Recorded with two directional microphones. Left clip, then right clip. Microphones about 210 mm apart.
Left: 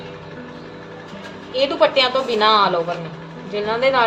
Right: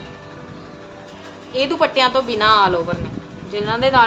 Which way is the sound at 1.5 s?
30° right (ahead or behind).